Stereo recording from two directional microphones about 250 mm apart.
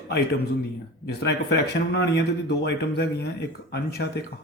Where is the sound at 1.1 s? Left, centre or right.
Left.